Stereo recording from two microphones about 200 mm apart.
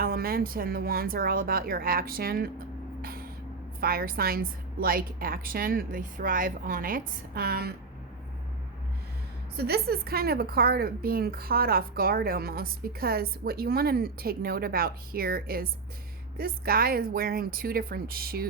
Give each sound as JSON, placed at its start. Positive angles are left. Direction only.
{"t": 0.0, "sound": "a woman's voice", "side_deg": -50}
{"t": 3.0, "sound": "vehicle", "side_deg": -45}
{"t": 3.8, "sound": "a woman's voice", "side_deg": -45}
{"t": 9.6, "sound": "a woman's voice", "side_deg": -50}